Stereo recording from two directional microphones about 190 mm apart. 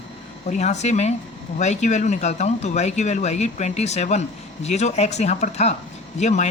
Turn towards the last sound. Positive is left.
turn(degrees=35)  # may be behind; listen again after turning